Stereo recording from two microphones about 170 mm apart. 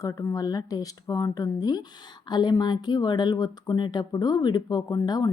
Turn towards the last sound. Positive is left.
turn(degrees=25)  # may be behind; listen again after turning